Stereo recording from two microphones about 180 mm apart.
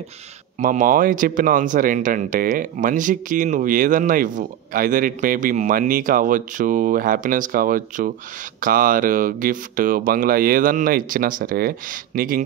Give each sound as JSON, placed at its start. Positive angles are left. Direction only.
{"t": 0.6, "sound": "speech", "side_deg": -45}